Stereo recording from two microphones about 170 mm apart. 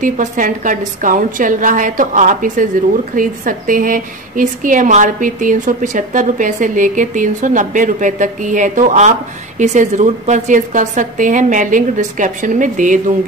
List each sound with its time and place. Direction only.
0.0 s a woman's voice: 50° right (ahead or behind)